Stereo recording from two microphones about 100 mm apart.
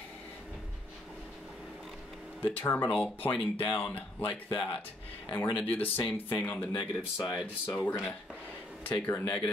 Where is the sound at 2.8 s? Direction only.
5° left (ahead or behind).